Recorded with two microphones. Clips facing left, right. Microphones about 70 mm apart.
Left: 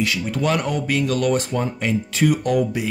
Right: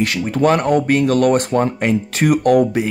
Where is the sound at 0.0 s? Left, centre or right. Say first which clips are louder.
Right 6 dB; right.